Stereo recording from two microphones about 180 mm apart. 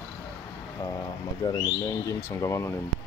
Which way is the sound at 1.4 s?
25° left (ahead or behind).